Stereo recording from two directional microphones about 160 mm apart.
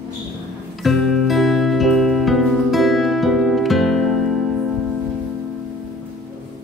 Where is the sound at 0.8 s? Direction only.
Centre (ahead or behind).